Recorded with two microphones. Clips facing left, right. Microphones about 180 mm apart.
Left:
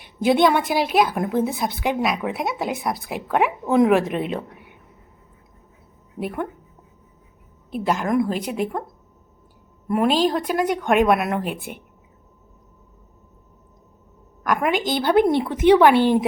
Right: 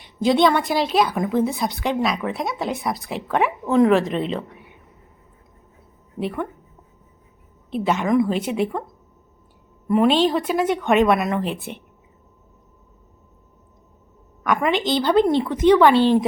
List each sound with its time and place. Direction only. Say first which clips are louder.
0.0 s a sound: even; 60° left (ahead or behind)
0.5 s a woman's voice: even; 10° left (ahead or behind)
6.1 s a woman's voice: right 1 dB; 5° left (ahead or behind)
7.7 s speech: right 2 dB; centre (ahead or behind)
9.9 s speech: right 2 dB; 5° left (ahead or behind)
14.4 s a woman's voice: right 1 dB; centre (ahead or behind)